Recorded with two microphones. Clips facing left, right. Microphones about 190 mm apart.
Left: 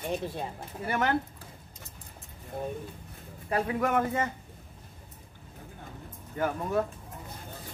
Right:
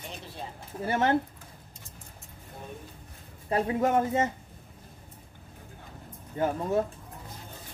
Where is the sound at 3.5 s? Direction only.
25° right (ahead or behind).